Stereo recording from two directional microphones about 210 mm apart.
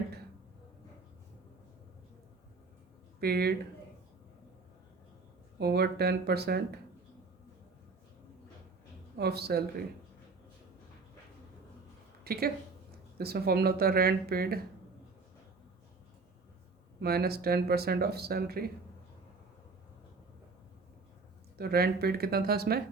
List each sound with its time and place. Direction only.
3.2 s speech: 50° right (ahead or behind)
5.5 s speech: 50° right (ahead or behind)
9.1 s speech: 50° right (ahead or behind)
12.2 s a woman's voice: 45° right (ahead or behind)
17.0 s speech: 50° right (ahead or behind)
21.6 s speech: 50° right (ahead or behind)